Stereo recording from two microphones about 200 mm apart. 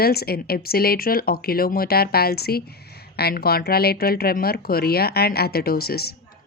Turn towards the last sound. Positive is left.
turn(degrees=50)  # may be behind; listen again after turning